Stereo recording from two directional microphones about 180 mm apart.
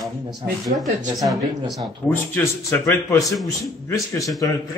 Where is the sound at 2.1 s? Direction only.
10° left (ahead or behind).